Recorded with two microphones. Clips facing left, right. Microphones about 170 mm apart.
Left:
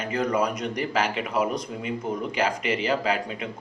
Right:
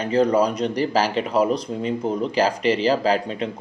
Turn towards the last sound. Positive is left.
turn(degrees=-30)  # may be behind; listen again after turning